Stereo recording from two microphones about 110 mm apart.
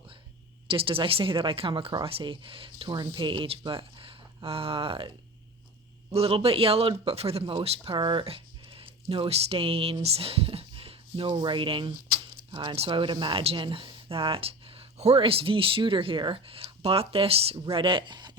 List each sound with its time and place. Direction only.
0.7 s speech: 55° right (ahead or behind)
6.1 s speech: 65° right (ahead or behind)
7.9 s speech: 45° right (ahead or behind)
12.7 s speech: 60° right (ahead or behind); by 18.3 s 45° right (ahead or behind)